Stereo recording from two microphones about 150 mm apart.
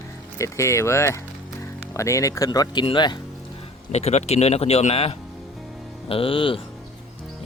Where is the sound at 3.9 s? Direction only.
45° left (ahead or behind).